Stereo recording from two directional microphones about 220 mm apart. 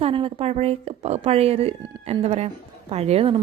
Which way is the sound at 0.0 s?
25° right (ahead or behind).